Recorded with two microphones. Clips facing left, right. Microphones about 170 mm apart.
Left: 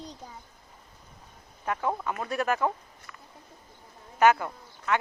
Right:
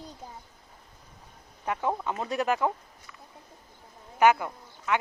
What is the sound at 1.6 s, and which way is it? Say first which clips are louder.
Speech: even; 20° right (ahead or behind).